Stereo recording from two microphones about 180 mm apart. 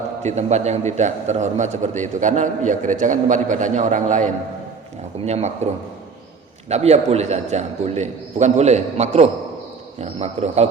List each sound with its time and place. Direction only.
0.2 s a man's voice: 40° right (ahead or behind)
6.7 s a man's voice: 35° right (ahead or behind)